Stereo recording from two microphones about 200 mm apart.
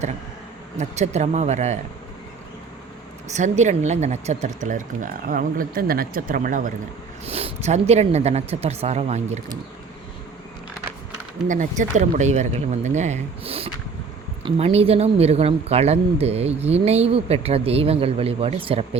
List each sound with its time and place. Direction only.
0.8 s speech: 35° right (ahead or behind)
3.3 s speech: 35° right (ahead or behind)
7.3 s speech: 30° right (ahead or behind)
11.4 s speech: 40° right (ahead or behind)